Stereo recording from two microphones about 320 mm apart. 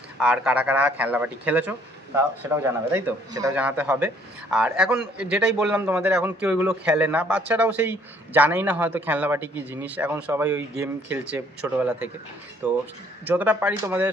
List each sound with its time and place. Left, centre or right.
0.2 s a man's voice: centre